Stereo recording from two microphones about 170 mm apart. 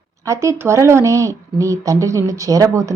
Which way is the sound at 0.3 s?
15° right (ahead or behind).